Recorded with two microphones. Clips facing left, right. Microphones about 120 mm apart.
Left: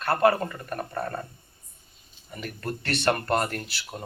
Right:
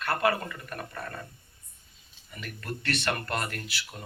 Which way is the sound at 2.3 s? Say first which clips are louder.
Left 5 dB; 35° left (ahead or behind).